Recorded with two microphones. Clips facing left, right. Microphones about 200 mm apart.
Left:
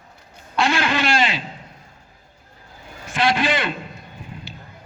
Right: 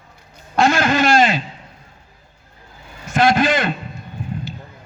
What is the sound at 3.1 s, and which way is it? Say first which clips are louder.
Speech: right 5 dB; 45° right (ahead or behind).